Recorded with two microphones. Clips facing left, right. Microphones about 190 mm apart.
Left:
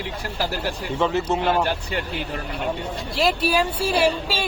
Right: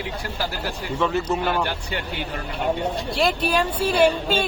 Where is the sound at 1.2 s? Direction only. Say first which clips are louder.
Left 2 dB; 25° left (ahead or behind).